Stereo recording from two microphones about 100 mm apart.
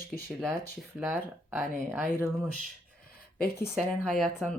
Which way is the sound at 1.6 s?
20° right (ahead or behind).